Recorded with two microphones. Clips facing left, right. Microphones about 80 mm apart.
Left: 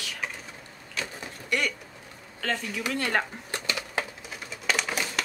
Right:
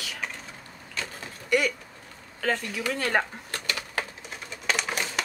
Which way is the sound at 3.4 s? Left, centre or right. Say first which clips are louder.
Left 1 dB; centre.